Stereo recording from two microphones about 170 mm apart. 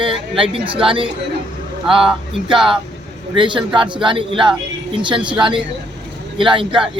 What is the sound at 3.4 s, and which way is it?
Speech, 30° right (ahead or behind).